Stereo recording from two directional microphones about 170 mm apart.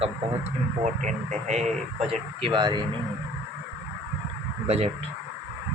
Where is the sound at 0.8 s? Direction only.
45° right (ahead or behind).